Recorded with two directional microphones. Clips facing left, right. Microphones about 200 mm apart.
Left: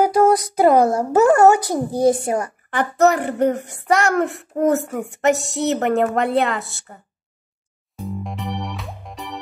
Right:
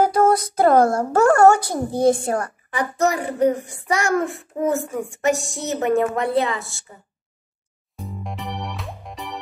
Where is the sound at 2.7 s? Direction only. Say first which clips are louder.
Left 5 dB; 65° left (ahead or behind).